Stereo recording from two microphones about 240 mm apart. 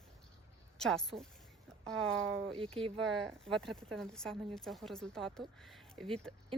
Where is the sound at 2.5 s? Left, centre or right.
Right.